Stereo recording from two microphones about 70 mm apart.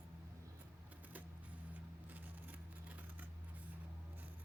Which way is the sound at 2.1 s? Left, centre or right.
Right.